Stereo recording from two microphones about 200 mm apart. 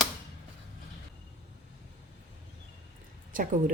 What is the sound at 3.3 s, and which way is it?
Speech, 40° right (ahead or behind).